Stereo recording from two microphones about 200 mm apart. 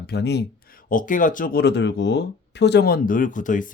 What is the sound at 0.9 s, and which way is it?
Speech, 40° left (ahead or behind).